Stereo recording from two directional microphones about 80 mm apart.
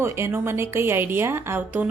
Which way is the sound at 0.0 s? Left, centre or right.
Right.